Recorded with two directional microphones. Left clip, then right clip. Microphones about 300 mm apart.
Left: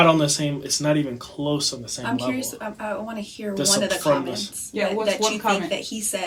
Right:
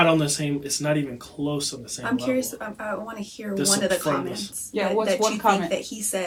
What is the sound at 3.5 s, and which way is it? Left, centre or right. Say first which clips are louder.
Speech: left 1 dB; centre.